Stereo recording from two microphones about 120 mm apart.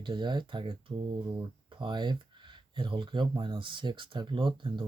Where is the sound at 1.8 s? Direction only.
40° right (ahead or behind).